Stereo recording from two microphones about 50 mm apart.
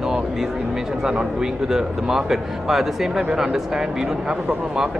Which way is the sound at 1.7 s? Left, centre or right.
Centre.